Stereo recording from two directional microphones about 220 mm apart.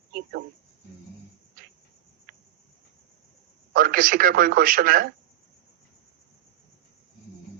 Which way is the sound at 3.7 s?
40° right (ahead or behind).